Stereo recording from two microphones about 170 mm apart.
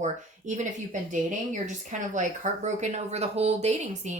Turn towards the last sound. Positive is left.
turn(degrees=-40)  # may be behind; listen again after turning